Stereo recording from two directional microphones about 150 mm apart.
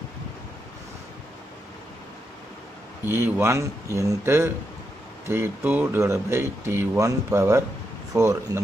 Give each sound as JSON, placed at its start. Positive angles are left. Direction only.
{"t": 3.1, "sound": "speech", "side_deg": -15}